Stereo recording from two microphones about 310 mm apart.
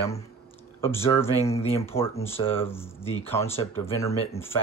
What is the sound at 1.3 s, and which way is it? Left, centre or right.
Speech, centre.